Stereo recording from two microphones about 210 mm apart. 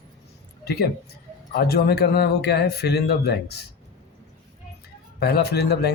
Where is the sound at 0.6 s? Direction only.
50° left (ahead or behind).